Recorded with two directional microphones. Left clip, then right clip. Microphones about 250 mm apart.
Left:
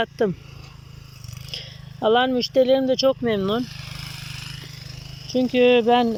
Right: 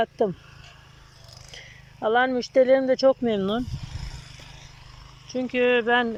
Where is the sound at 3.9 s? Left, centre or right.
Left.